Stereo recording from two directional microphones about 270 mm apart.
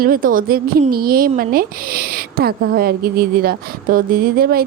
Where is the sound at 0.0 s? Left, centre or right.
Right.